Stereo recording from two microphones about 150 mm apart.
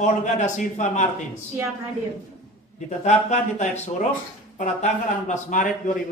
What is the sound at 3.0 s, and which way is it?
A man's voice, 50° left (ahead or behind).